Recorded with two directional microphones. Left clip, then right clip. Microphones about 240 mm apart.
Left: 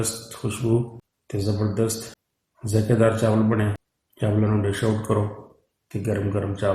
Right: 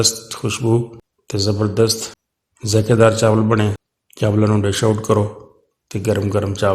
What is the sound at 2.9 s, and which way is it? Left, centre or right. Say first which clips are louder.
A man's voice: right 7 dB; right.